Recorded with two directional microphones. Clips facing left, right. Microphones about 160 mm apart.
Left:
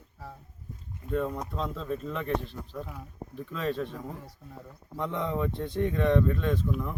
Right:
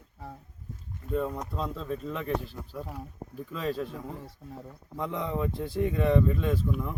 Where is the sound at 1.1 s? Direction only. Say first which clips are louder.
Even; 5° right (ahead or behind).